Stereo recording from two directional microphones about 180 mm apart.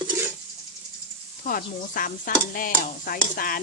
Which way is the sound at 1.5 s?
50° left (ahead or behind).